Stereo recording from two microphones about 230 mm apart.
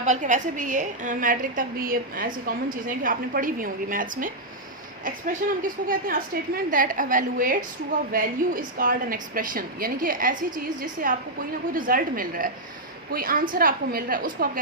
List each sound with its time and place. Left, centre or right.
0.0 s a woman's voice: right